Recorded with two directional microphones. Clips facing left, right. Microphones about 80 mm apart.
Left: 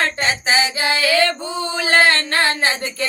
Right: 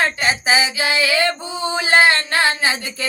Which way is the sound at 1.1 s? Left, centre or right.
Centre.